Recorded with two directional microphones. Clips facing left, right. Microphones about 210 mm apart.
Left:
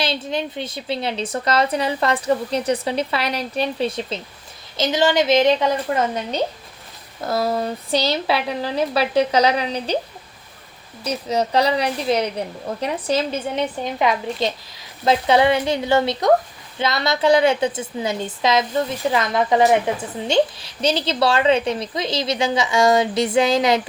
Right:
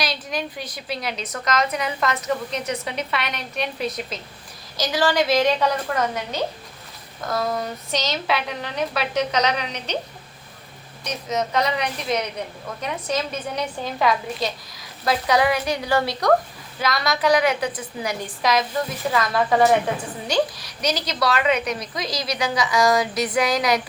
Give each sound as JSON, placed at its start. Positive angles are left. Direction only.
{"t": 0.0, "sound": "a woman's voice", "side_deg": 25}
{"t": 11.0, "sound": "a woman's voice", "side_deg": 30}